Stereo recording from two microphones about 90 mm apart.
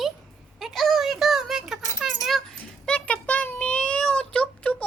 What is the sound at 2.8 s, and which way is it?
Cat, 15° left (ahead or behind).